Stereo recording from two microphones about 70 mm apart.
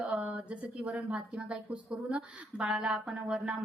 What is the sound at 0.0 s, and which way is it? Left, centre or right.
A woman's voice, centre.